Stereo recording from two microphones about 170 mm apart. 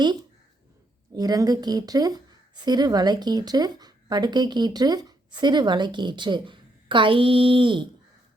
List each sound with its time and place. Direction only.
1.1 s speech: 20° right (ahead or behind)